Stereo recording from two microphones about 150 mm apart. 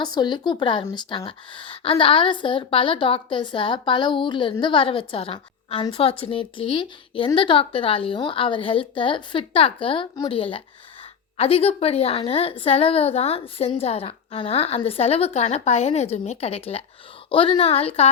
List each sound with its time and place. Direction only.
0.0 s a woman's voice: 30° left (ahead or behind)